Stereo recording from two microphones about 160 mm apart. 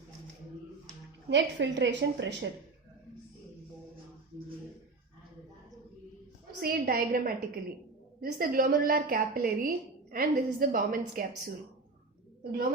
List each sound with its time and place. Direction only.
1.3 s a woman's voice: 90° right
6.6 s a woman's voice: 70° right (ahead or behind)